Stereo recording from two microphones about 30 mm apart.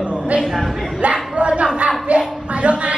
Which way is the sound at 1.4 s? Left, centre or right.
Right.